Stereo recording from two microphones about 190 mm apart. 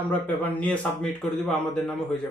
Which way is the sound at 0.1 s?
10° left (ahead or behind).